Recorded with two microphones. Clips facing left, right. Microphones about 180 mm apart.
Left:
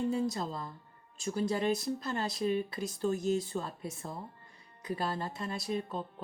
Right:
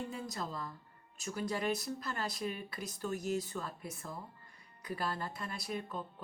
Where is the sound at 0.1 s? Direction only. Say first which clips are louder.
Left 8 dB; 30° left (ahead or behind).